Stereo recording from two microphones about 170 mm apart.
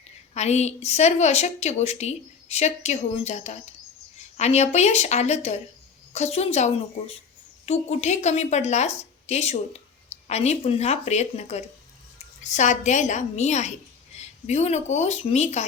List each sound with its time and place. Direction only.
0.3 s a woman's voice: 40° left (ahead or behind)